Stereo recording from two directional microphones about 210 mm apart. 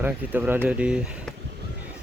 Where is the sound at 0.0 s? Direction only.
10° right (ahead or behind).